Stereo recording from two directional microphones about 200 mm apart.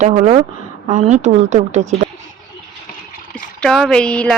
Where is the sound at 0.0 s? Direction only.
35° right (ahead or behind).